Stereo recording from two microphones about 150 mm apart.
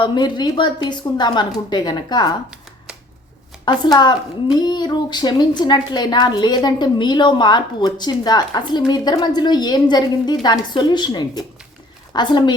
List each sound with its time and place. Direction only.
0.0 s a woman's voice: 30° left (ahead or behind)
3.7 s a woman's voice: 30° left (ahead or behind)